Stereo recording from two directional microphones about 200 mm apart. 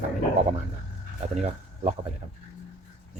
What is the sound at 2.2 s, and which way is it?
Speech, 30° right (ahead or behind).